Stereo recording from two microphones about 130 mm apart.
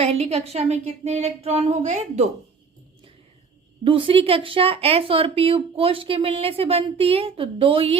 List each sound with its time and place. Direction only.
0.0 s speech: 50° right (ahead or behind)
3.8 s speech: 45° right (ahead or behind)